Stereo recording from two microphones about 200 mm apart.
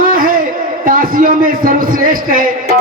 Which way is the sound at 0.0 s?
45° right (ahead or behind).